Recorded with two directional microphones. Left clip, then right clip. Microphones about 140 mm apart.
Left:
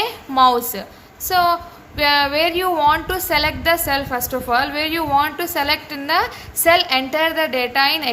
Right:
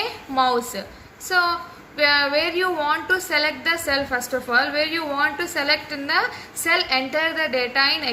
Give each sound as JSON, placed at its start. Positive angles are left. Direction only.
{"t": 0.0, "sound": "a woman's voice", "side_deg": 90}